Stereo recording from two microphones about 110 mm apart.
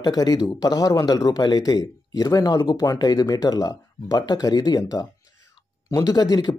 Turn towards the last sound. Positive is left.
turn(degrees=40)  # may be behind; listen again after turning